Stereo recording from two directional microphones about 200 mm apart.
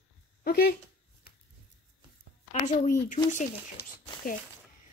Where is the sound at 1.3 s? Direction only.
50° left (ahead or behind).